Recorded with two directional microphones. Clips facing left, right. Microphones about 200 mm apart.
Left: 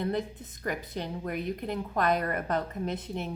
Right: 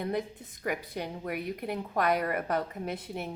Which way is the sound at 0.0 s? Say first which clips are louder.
Left 1 dB; 10° right (ahead or behind).